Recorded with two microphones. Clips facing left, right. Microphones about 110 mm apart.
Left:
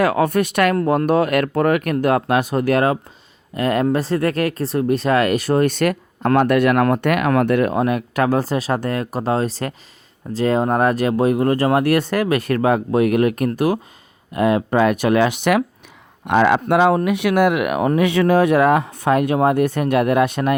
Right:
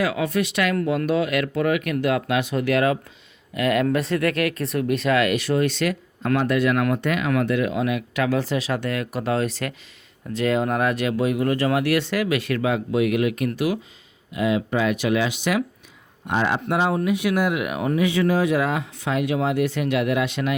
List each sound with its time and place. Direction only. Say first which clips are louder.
0.0 s speech: left 6 dB; 50° left (ahead or behind)
16.2 s speech: left 8 dB; 85° left; by 20.6 s 50° left (ahead or behind)